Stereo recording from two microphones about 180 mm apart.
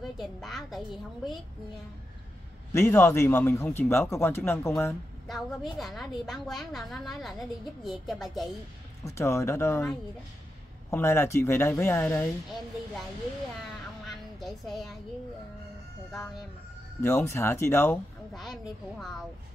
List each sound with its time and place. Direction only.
0.0 s a sound: centre (ahead or behind)
2.7 s speech: 15° left (ahead or behind)
5.3 s a woman's voice: centre (ahead or behind)
9.1 s speech: 15° left (ahead or behind)
10.9 s speech: 15° left (ahead or behind)
14.0 s a sound: centre (ahead or behind)
16.1 s a woman's voice: 5° left (ahead or behind)
17.0 s speech: 15° left (ahead or behind)
18.3 s a woman's voice: centre (ahead or behind)